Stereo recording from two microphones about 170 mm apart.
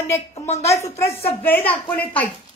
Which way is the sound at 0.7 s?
15° left (ahead or behind).